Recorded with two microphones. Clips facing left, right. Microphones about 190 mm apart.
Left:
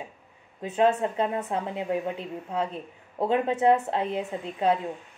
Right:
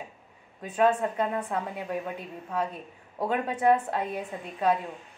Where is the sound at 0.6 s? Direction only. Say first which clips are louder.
Left 1 dB; 25° left (ahead or behind).